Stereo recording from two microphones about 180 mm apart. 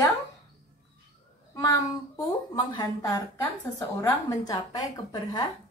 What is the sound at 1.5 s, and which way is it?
A woman's voice, 20° left (ahead or behind).